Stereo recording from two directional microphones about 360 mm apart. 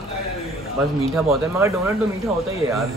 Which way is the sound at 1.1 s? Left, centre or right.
Centre.